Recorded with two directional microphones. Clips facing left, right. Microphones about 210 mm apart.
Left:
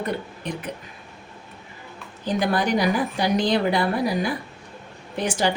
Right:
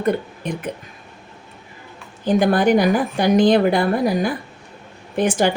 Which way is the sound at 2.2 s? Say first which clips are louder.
Right 7 dB; 55° right (ahead or behind).